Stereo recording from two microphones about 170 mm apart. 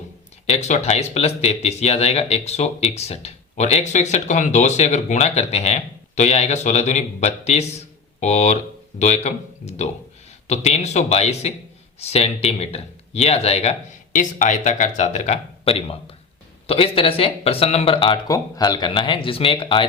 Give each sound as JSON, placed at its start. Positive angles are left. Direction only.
{"t": 0.4, "sound": "speech", "side_deg": 40}
{"t": 18.3, "sound": "speech", "side_deg": 20}